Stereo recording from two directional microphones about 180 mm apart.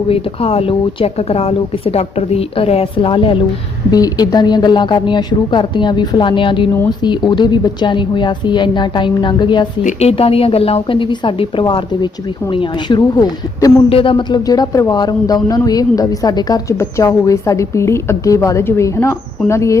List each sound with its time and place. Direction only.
0.1 s speech: 35° left (ahead or behind)
9.8 s speech: 35° left (ahead or behind); by 19.7 s 15° left (ahead or behind)